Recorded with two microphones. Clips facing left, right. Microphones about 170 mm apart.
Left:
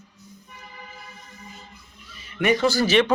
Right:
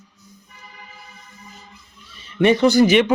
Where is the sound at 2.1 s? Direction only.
25° right (ahead or behind).